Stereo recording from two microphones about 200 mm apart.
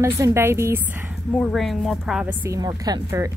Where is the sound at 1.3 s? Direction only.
Centre (ahead or behind); by 3.3 s 15° right (ahead or behind).